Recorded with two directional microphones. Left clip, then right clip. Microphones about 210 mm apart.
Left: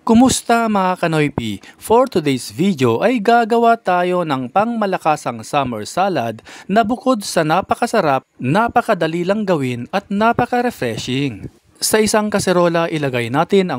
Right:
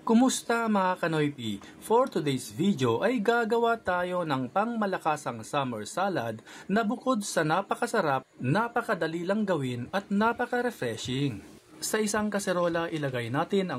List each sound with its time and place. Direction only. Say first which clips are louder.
0.0 s speech: left 11 dB; 45° left (ahead or behind)